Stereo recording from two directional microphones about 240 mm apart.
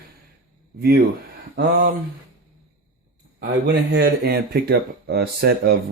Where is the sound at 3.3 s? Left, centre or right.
Right.